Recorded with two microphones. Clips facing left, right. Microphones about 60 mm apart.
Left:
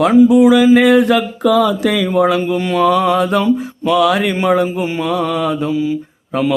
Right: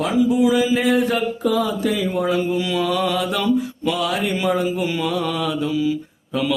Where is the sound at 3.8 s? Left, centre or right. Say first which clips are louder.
Left 10 dB; left.